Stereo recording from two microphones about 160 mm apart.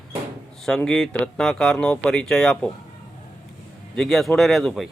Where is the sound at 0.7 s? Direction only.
5° left (ahead or behind).